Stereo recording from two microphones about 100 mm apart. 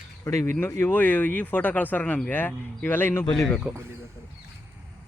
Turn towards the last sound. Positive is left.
turn(degrees=0)  # may be behind; listen again after turning